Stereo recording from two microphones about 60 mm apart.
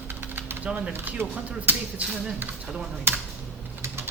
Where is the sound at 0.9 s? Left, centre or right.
Right.